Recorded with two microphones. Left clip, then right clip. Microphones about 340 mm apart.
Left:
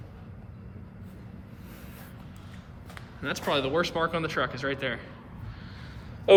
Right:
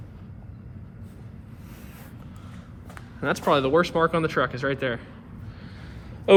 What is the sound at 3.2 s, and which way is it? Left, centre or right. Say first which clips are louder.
Speech: right 6 dB; centre.